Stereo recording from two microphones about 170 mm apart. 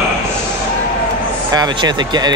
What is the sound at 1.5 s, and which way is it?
Speech, 25° right (ahead or behind).